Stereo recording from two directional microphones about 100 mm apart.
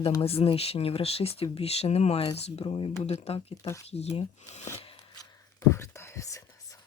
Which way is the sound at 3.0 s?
90° left.